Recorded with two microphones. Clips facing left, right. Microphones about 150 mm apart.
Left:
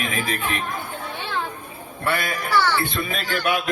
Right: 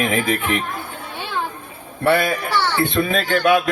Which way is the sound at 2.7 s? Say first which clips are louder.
Right 6 dB; 15° right (ahead or behind).